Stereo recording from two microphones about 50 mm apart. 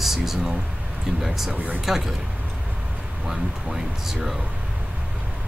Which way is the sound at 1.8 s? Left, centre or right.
Centre.